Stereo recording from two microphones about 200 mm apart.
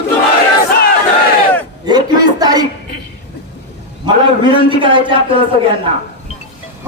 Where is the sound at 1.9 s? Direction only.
20° right (ahead or behind).